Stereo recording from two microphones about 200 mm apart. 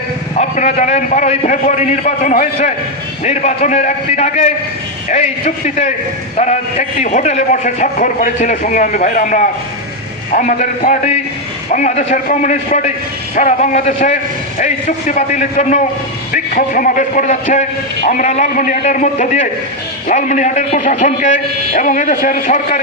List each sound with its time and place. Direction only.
0.3 s a man's voice: 35° left (ahead or behind)
5.6 s a man's voice: 35° left (ahead or behind)